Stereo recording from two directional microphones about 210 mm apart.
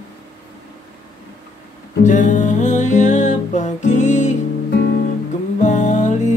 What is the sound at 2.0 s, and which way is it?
Music, 35° left (ahead or behind).